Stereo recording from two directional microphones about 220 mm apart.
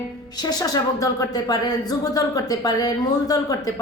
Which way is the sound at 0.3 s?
15° left (ahead or behind).